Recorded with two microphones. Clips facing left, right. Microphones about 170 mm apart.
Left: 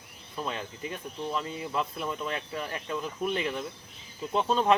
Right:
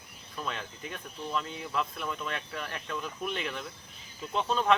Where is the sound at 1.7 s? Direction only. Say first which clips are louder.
Left 1 dB; 30° left (ahead or behind).